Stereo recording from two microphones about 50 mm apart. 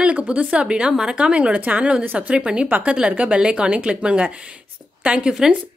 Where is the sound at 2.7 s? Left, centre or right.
Right.